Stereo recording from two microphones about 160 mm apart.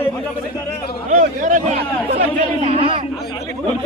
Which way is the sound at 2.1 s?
50° right (ahead or behind).